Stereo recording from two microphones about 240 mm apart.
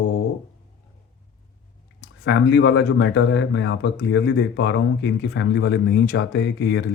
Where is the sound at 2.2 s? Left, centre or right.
Left.